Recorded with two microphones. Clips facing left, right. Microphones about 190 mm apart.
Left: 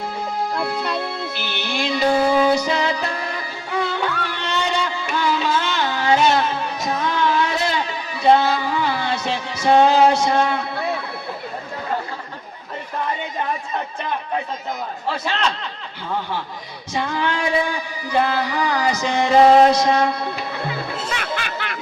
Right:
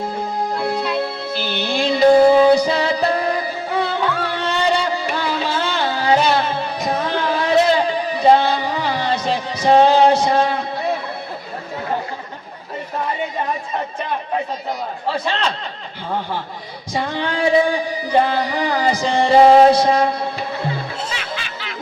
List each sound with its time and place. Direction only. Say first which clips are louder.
0.5 s music: right 5 dB; 35° right (ahead or behind)
16.9 s music: right 1 dB; 35° right (ahead or behind)
21.1 s music: left 2 dB; 55° left (ahead or behind)